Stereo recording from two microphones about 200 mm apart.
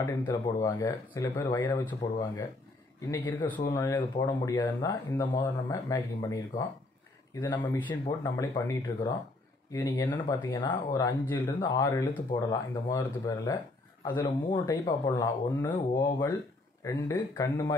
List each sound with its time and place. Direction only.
0.0 s speech: 20° left (ahead or behind)